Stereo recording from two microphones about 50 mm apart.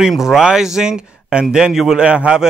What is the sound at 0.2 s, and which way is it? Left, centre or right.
Speech, centre.